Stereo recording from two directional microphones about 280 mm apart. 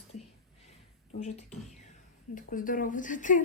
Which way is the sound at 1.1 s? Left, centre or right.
Left.